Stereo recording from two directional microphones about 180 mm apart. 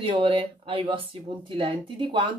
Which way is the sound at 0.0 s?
30° right (ahead or behind).